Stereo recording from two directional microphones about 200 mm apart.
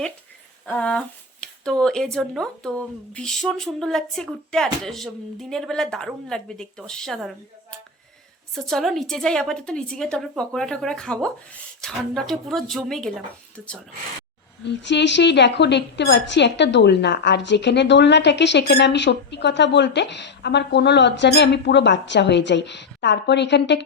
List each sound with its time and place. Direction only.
0.6 s speech: 5° left (ahead or behind)
14.8 s a woman's voice: 60° left (ahead or behind)